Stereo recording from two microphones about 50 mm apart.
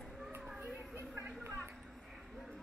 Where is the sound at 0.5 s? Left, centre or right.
Right.